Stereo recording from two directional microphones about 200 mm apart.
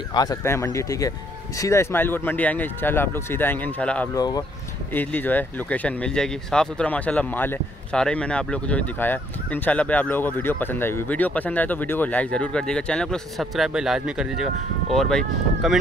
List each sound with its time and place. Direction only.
0.1 s speech: 20° left (ahead or behind)
4.1 s speech: 20° left (ahead or behind); by 15.8 s centre (ahead or behind)